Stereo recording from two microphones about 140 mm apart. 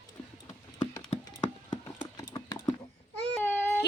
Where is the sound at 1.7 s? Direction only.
30° left (ahead or behind).